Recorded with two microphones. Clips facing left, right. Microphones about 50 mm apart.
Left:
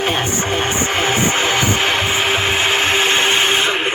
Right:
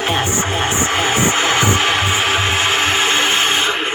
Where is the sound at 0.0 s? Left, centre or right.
Centre.